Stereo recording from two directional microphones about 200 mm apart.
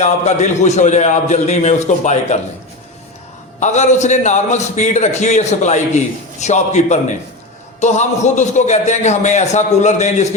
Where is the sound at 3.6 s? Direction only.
35° left (ahead or behind).